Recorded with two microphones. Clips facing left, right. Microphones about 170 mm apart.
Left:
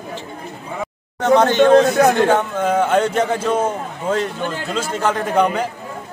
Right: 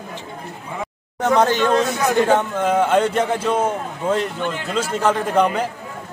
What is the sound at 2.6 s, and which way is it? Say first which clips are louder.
Speech: left 1 dB; centre (ahead or behind).